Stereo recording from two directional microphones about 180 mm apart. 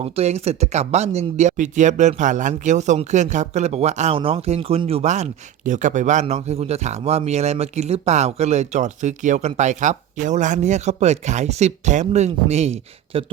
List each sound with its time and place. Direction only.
0.0 s speech: 35° right (ahead or behind)